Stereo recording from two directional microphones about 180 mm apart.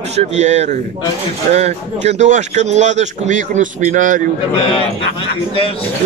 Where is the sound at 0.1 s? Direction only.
40° right (ahead or behind).